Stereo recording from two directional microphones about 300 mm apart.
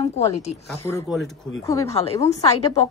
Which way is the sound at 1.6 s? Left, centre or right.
Centre.